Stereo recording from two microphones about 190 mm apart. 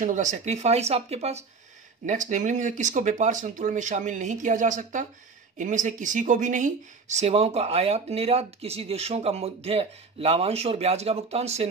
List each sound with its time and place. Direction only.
0.0 s speech: 40° right (ahead or behind)